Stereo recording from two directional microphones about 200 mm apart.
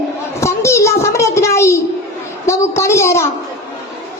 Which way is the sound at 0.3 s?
15° left (ahead or behind).